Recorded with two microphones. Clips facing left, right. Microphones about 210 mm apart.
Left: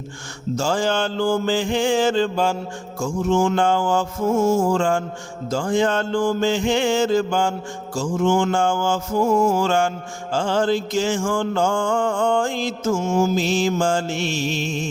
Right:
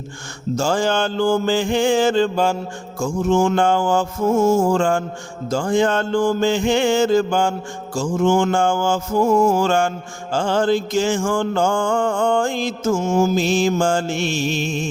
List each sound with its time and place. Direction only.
0.5 s mantra: 50° right (ahead or behind)